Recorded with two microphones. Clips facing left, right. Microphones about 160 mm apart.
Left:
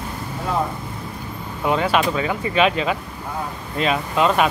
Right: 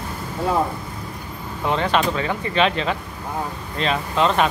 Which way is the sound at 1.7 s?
5° left (ahead or behind).